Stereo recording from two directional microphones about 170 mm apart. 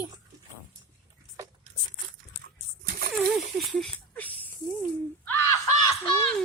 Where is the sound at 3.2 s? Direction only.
Centre (ahead or behind).